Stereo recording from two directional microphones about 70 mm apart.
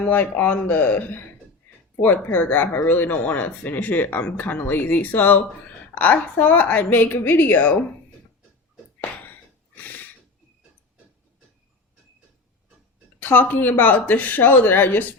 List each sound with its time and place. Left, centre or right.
0.0 s speech: left
9.7 s a sound: left
13.1 s speech: left